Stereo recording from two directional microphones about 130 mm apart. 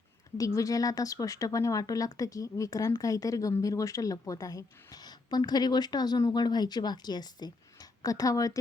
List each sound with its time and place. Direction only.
0.3 s speech: 25° left (ahead or behind)